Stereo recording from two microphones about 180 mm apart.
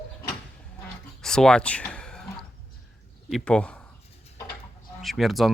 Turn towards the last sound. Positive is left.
turn(degrees=0)  # may be behind; listen again after turning